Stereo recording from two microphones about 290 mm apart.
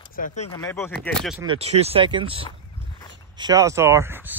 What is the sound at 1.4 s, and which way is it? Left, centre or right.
Speech, centre.